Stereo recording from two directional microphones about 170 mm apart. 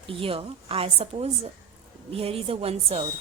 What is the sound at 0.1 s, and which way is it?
A woman's voice, 30° right (ahead or behind).